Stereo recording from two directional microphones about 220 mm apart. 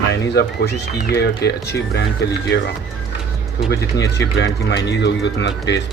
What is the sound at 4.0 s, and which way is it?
Speech, 50° left (ahead or behind).